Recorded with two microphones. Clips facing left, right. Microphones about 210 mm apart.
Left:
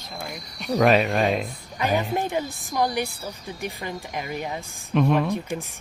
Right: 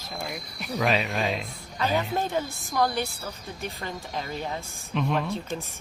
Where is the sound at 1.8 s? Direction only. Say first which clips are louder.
Left 2 dB; 15° left (ahead or behind).